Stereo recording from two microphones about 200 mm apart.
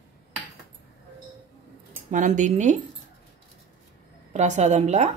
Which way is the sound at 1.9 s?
40° right (ahead or behind).